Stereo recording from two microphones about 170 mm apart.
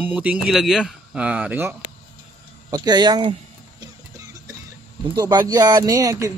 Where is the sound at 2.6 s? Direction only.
25° right (ahead or behind).